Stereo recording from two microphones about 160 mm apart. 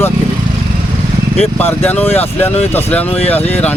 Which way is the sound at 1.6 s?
10° left (ahead or behind).